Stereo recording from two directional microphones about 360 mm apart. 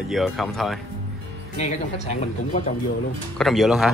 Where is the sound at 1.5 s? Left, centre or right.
Centre.